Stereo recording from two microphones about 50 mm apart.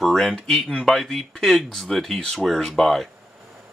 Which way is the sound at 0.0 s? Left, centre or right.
Centre.